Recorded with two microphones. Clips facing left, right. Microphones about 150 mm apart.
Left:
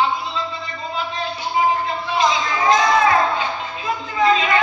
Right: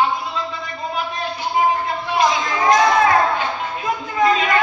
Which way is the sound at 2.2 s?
45° right (ahead or behind).